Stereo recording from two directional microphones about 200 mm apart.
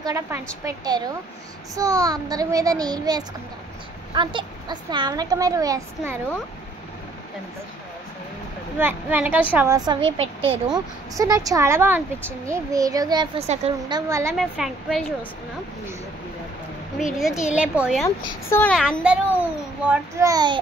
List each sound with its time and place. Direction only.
0.0 s a woman's voice: 15° right (ahead or behind)
8.7 s a child's voice: 10° right (ahead or behind)
9.8 s a woman's voice: 25° right (ahead or behind)
11.1 s a child's voice: 15° right (ahead or behind)
13.9 s a child's voice: 15° right (ahead or behind)
14.3 s a child's voice: centre (ahead or behind)
17.0 s a child's voice: centre (ahead or behind)
18.0 s a child's voice: 10° left (ahead or behind)
18.8 s a child's voice: 5° right (ahead or behind)
20.2 s a woman's voice: 20° right (ahead or behind)